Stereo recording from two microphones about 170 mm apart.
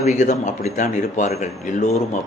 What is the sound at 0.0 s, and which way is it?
Speech, 45° left (ahead or behind).